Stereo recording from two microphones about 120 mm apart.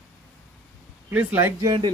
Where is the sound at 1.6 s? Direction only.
35° right (ahead or behind).